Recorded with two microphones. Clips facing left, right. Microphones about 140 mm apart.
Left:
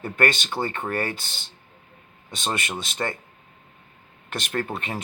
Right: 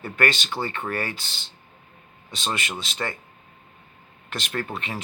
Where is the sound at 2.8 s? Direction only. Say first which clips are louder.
Left 2 dB; 50° left (ahead or behind).